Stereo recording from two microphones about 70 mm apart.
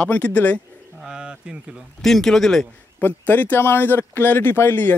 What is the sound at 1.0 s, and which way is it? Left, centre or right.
Speech, centre.